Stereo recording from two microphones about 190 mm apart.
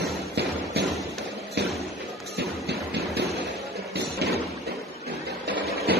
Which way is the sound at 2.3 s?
60° right (ahead or behind).